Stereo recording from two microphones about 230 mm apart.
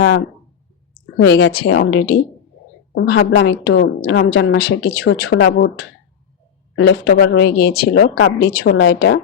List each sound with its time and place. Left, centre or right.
1.1 s a woman's voice: left
8.7 s speech: left